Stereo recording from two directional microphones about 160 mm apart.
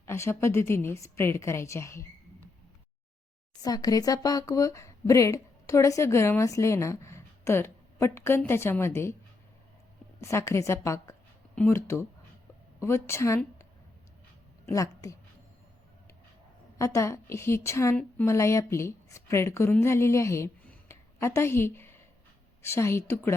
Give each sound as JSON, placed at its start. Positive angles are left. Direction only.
{"t": 0.0, "sound": "a woman's voice", "side_deg": 15}
{"t": 3.6, "sound": "speech", "side_deg": 25}
{"t": 10.2, "sound": "a woman's voice", "side_deg": 15}
{"t": 14.7, "sound": "a woman's voice", "side_deg": 20}
{"t": 16.7, "sound": "a woman's voice", "side_deg": 20}